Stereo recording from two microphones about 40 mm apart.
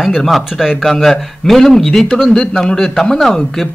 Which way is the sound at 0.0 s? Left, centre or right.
Centre.